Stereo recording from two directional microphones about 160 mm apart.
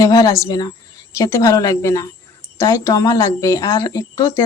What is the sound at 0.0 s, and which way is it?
Speech, 25° left (ahead or behind).